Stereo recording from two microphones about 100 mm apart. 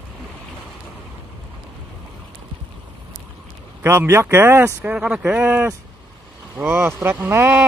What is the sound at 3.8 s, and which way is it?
Speech, 25° right (ahead or behind).